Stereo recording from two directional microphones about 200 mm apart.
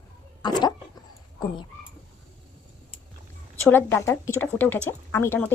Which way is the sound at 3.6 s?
10° left (ahead or behind).